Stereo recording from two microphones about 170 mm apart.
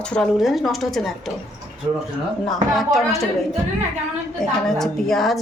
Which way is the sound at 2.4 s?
Centre (ahead or behind).